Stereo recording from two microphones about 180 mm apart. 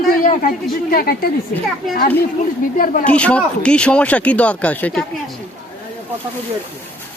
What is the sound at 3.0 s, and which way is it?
Speech, 5° left (ahead or behind).